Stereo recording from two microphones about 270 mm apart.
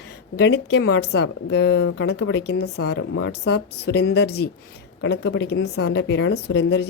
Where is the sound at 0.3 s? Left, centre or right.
Left.